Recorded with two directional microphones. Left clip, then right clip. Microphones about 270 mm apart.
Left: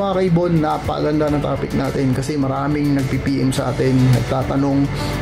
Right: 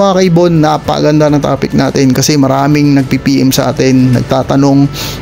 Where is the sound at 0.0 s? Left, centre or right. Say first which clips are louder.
Right 10 dB; right.